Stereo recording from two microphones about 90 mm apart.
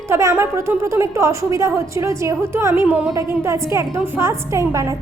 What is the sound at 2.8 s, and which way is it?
Speech, 10° right (ahead or behind).